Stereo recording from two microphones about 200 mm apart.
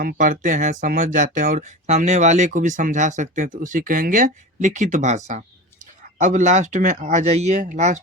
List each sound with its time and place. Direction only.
0.0 s speech: 40° right (ahead or behind)